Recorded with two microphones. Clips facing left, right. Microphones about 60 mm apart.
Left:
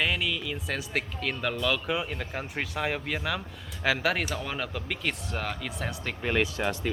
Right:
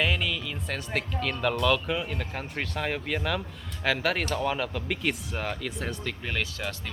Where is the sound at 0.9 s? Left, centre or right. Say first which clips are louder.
Right 4 dB; centre.